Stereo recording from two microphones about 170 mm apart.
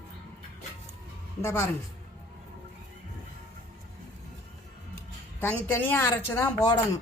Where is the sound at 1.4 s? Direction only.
15° left (ahead or behind).